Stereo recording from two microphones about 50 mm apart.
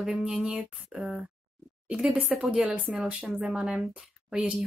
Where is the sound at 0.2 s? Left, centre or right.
Centre.